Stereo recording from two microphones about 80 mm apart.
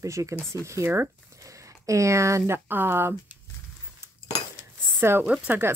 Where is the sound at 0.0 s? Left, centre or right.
Right.